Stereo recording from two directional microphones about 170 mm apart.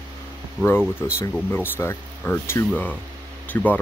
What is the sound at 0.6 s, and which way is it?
Speech, 10° left (ahead or behind).